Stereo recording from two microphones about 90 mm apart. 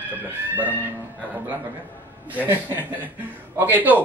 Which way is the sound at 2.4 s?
20° right (ahead or behind).